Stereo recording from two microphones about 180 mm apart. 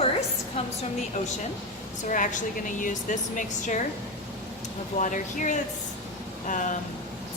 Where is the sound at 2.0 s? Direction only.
45° left (ahead or behind).